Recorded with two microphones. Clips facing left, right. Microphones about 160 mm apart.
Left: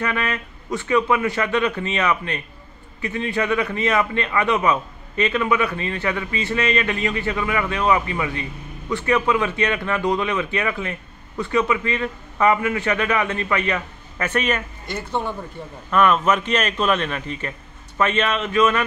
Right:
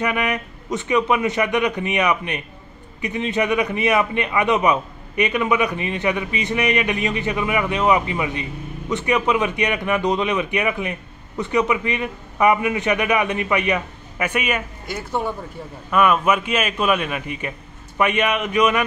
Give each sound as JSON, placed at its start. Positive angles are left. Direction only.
{"t": 0.0, "sound": "a man's voice", "side_deg": -15}